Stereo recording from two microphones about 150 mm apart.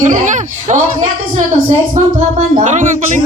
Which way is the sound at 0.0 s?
50° right (ahead or behind).